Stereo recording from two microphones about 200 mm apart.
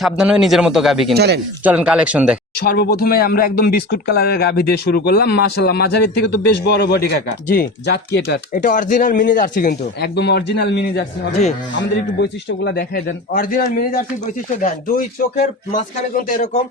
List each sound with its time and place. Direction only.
0.0 s a man's voice: 5° right (ahead or behind)
1.1 s speech: 55° right (ahead or behind)
1.6 s a man's voice: 5° right (ahead or behind)
2.6 s speech: 50° left (ahead or behind)
8.5 s speech: 40° left (ahead or behind)